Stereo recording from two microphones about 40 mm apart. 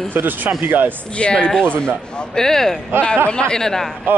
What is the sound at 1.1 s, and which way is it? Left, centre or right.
Speech, left.